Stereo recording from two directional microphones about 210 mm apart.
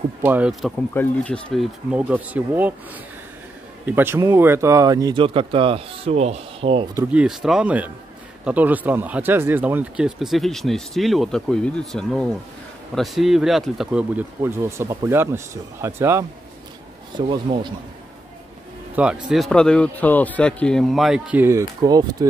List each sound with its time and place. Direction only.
0.2 s speech: 10° right (ahead or behind)
3.8 s speech: 10° right (ahead or behind); by 6.9 s 25° right (ahead or behind)
7.0 s speech: 5° right (ahead or behind)
17.3 s speech: 20° right (ahead or behind)
19.2 s speech: centre (ahead or behind); by 22.0 s 15° right (ahead or behind)